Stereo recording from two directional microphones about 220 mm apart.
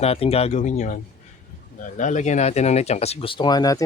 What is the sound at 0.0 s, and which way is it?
Speech, 25° left (ahead or behind).